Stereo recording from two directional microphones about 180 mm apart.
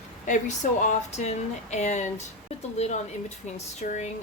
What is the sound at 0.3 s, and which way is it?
Speech, 40° left (ahead or behind).